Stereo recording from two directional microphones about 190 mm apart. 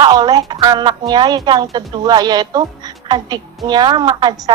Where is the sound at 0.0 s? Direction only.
20° right (ahead or behind).